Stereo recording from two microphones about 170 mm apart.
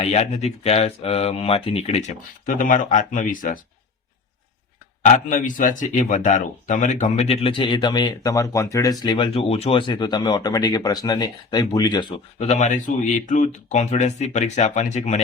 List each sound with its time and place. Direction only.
0.0 s speech: 40° left (ahead or behind)
5.0 s speech: 50° left (ahead or behind); by 12.1 s 25° left (ahead or behind)
12.4 s speech: 40° left (ahead or behind)